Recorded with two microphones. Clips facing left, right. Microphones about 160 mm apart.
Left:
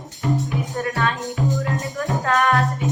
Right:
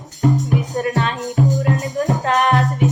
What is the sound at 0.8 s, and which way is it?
Music, 20° right (ahead or behind).